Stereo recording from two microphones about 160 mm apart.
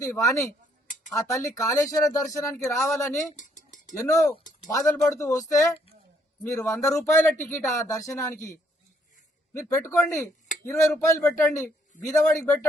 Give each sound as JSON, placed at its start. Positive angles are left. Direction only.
{"t": 0.0, "sound": "speech", "side_deg": 20}
{"t": 3.3, "sound": "dishes", "side_deg": 50}
{"t": 3.9, "sound": "a man's voice", "side_deg": 20}